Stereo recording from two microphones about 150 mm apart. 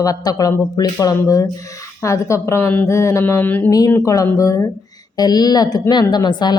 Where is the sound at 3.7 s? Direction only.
25° left (ahead or behind).